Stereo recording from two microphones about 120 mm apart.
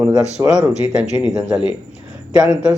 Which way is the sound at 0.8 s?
10° right (ahead or behind).